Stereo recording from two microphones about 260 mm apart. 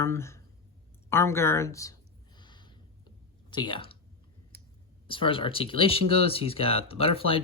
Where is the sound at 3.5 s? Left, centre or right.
Centre.